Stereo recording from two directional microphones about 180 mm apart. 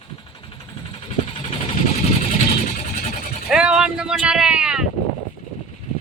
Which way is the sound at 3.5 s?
5° right (ahead or behind).